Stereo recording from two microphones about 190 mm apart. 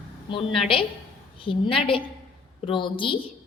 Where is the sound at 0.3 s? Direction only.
25° left (ahead or behind).